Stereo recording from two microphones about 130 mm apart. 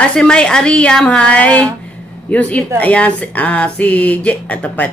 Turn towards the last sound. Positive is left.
turn(degrees=10)  # may be behind; listen again after turning